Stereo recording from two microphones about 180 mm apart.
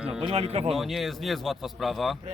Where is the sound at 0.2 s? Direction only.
35° right (ahead or behind).